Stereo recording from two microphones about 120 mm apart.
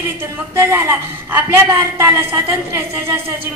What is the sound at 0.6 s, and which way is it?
A woman's voice, 20° right (ahead or behind).